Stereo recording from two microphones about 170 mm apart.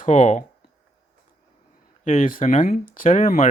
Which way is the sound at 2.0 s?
45° left (ahead or behind).